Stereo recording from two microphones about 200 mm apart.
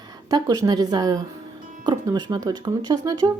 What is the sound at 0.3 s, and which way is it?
Speech, 20° right (ahead or behind).